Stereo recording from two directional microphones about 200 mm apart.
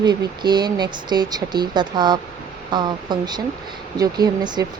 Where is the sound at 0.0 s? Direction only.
20° right (ahead or behind).